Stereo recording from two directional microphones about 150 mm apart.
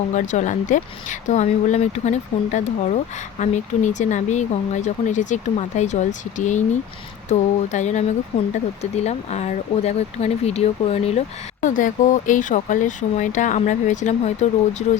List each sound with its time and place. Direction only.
0.1 s speech: 55° left (ahead or behind)
11.6 s speech: 60° left (ahead or behind)